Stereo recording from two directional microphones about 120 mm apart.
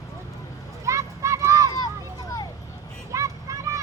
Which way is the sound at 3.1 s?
25° right (ahead or behind).